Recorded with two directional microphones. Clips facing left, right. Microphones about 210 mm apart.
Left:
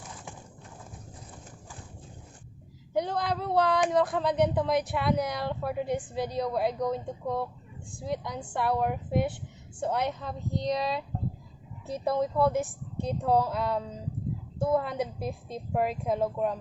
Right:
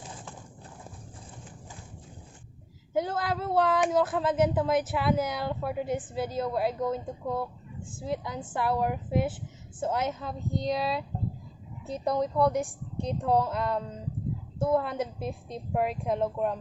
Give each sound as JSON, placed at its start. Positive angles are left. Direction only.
{"t": 2.9, "sound": "speech", "side_deg": 0}